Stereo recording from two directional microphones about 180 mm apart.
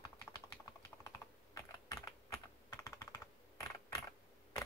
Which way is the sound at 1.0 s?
20° left (ahead or behind).